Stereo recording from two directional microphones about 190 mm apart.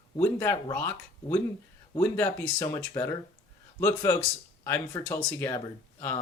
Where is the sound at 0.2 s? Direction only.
15° left (ahead or behind).